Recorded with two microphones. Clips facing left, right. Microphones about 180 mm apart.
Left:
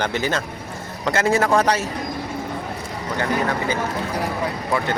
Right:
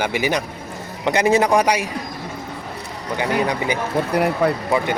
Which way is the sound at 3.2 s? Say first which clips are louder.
Right 2 dB; 15° right (ahead or behind).